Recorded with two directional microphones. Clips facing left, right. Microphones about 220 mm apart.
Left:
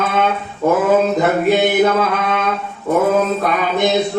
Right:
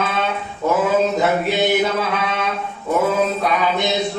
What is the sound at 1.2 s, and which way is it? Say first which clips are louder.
Speech: left 4 dB; 50° left (ahead or behind).